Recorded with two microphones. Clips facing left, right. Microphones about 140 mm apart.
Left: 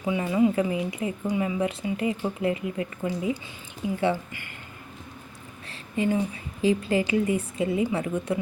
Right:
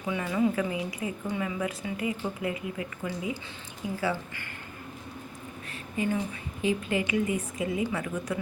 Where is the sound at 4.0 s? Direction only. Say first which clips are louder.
Left 5 dB; 20° left (ahead or behind).